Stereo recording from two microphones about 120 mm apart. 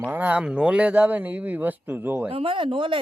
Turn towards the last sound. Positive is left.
turn(degrees=-45)  # may be behind; listen again after turning